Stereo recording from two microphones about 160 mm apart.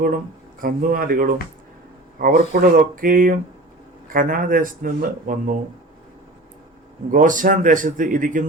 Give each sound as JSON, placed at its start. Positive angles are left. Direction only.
{"t": 0.6, "sound": "speech", "side_deg": -60}
{"t": 7.1, "sound": "speech", "side_deg": -55}